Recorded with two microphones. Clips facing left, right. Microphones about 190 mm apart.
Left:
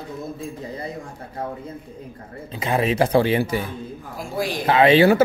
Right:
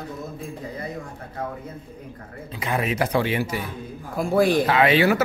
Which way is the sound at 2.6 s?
25° left (ahead or behind).